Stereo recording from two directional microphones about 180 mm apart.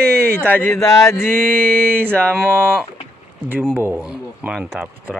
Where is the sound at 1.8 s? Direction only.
10° right (ahead or behind).